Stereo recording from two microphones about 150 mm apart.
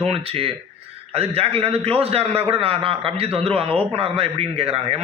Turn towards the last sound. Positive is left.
turn(degrees=-45)  # may be behind; listen again after turning